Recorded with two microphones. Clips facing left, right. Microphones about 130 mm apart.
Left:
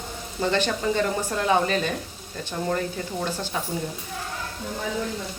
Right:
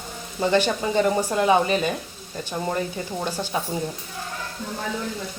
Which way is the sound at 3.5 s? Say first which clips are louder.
Right 3 dB; 20° right (ahead or behind).